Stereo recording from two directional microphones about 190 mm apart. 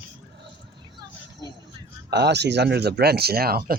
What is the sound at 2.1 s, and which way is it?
Speech, 60° right (ahead or behind).